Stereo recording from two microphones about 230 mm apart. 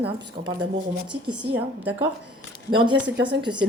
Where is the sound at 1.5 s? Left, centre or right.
Centre.